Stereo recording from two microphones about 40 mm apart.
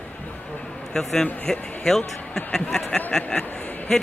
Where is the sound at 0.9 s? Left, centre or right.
Centre.